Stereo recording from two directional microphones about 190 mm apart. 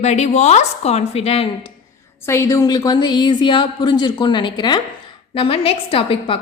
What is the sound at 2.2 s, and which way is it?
A woman's voice, 15° left (ahead or behind).